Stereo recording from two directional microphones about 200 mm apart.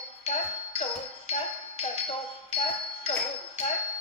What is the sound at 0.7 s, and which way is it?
Music, 30° left (ahead or behind).